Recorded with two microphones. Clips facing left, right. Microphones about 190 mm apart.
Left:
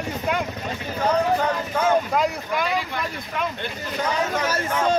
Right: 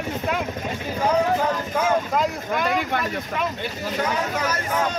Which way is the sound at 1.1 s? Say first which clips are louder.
Even; 5° right (ahead or behind).